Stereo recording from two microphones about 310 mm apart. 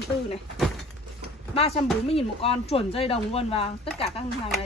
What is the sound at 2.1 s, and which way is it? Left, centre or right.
Speech, centre.